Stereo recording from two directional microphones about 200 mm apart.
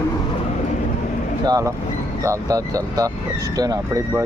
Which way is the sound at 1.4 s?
20° right (ahead or behind).